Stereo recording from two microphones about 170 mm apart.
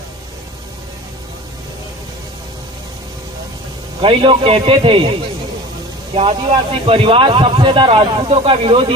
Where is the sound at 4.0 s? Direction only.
30° right (ahead or behind).